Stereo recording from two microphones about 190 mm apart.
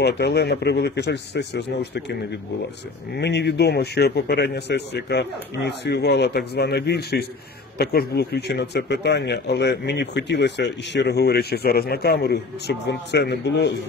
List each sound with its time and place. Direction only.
0.0 s speech: 60° left (ahead or behind)
3.2 s speech: 65° left (ahead or behind)